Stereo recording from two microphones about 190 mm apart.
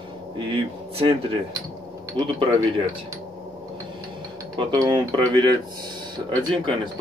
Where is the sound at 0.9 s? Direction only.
30° right (ahead or behind).